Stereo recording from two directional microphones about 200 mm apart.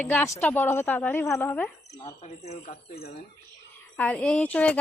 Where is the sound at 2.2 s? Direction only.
35° left (ahead or behind).